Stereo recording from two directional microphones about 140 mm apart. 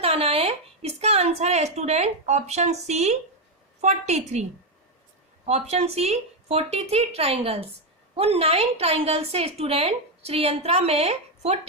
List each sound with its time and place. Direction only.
0.0 s a woman's voice: 45° right (ahead or behind)
5.5 s a woman's voice: 50° right (ahead or behind)